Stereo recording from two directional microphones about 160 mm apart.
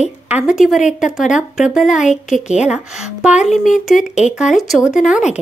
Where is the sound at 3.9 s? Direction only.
45° left (ahead or behind).